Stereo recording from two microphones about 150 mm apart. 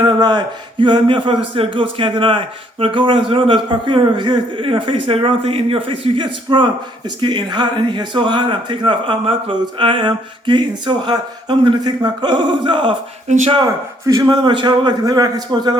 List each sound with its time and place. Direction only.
0.0 s speech: 30° right (ahead or behind)
14.1 s a man's voice: 25° right (ahead or behind)